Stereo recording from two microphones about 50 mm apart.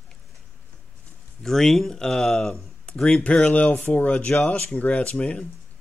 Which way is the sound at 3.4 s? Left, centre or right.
Left.